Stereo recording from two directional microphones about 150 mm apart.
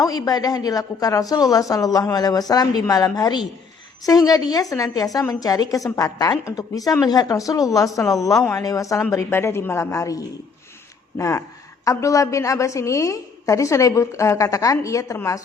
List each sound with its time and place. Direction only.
0.0 s a woman's voice: 25° left (ahead or behind)